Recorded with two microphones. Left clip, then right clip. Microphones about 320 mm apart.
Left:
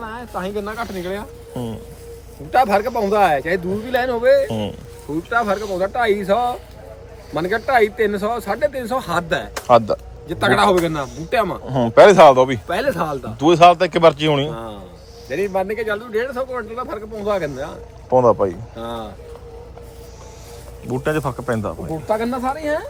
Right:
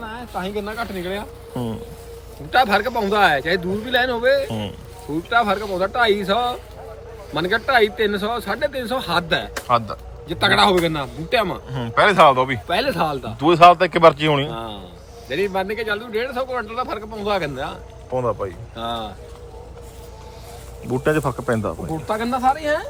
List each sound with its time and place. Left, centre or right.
0.0 s a man's voice: centre
18.1 s a man's voice: centre
18.8 s a man's voice: centre
20.8 s a man's voice: centre